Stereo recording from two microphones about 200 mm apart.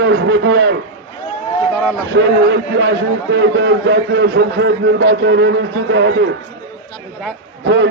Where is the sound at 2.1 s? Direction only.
65° right (ahead or behind).